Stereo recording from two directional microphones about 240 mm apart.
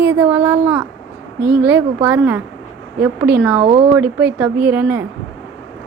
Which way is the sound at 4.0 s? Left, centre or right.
Centre.